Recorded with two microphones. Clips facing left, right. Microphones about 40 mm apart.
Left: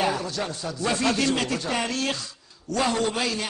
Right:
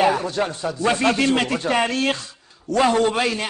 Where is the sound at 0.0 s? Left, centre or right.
Right.